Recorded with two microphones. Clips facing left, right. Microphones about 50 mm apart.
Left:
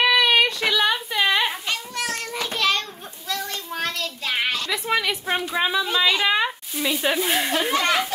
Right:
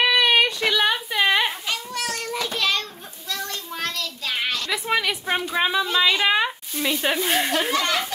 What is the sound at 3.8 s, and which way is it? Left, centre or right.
Child singing, left.